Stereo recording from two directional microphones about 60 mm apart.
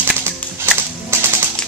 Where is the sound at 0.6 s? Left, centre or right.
Right.